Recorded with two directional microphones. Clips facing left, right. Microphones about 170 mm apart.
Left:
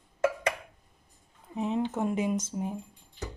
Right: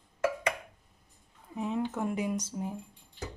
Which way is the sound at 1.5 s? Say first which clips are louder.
Left 3 dB; 25° left (ahead or behind).